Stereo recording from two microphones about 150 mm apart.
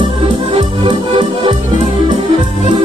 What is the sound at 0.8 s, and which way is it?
Music, 35° right (ahead or behind).